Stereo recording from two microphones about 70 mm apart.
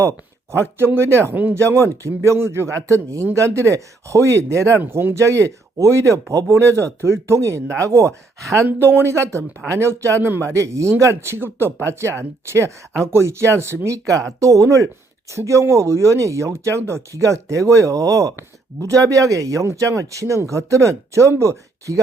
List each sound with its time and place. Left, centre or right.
0.9 s speech: right
1.5 s speech: right
4.8 s speech: right
5.2 s speech: right
8.6 s speech: right
10.5 s speech: right
14.3 s speech: right